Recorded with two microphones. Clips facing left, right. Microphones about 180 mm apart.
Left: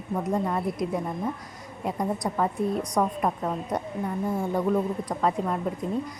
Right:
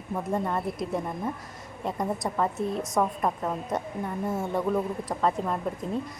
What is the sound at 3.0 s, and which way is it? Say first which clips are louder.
Speech: even; centre (ahead or behind).